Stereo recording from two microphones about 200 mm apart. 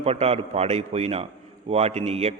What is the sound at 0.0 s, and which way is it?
A man's voice, 30° right (ahead or behind).